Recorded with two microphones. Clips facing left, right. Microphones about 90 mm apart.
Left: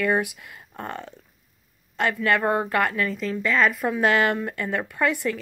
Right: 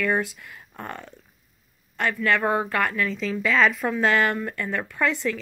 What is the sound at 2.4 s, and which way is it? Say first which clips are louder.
A woman's voice: left 1 dB; centre (ahead or behind).